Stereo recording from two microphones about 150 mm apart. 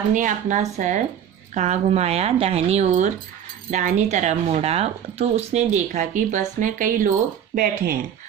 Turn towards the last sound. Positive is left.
turn(degrees=-70)  # may be behind; listen again after turning